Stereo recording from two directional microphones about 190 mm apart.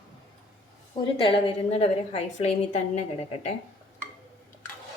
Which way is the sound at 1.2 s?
30° left (ahead or behind).